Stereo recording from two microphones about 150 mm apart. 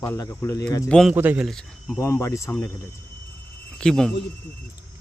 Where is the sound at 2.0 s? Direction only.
20° left (ahead or behind).